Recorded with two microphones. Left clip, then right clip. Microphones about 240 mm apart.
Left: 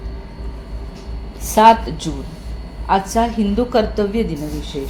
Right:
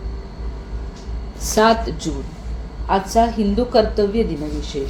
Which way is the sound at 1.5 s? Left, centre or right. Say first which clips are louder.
Left 5 dB; centre.